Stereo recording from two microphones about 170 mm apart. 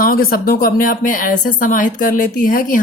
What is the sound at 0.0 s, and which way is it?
Speech, 60° left (ahead or behind).